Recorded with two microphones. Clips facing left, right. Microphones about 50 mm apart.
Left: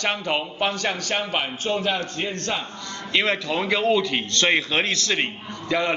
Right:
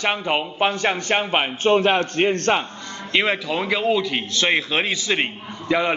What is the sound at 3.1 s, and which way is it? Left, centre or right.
Speech, centre.